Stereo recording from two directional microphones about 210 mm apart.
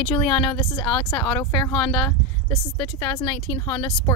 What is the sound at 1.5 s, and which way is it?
Speech, 20° left (ahead or behind).